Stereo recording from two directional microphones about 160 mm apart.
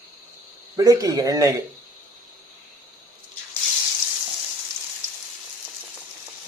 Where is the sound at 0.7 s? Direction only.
20° right (ahead or behind).